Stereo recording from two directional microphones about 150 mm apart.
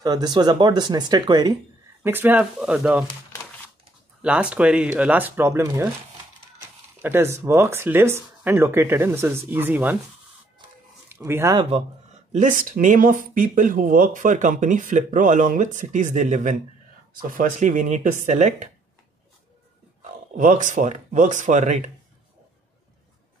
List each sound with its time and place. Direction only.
0.0 s speech: 25° right (ahead or behind)
2.0 s speech: 10° right (ahead or behind)
4.2 s speech: 10° right (ahead or behind)
7.0 s speech: 15° right (ahead or behind)
11.1 s speech: 15° right (ahead or behind)
11.5 s a man's voice: 40° right (ahead or behind)
12.3 s speech: 60° right (ahead or behind)
20.0 s speech: 55° right (ahead or behind)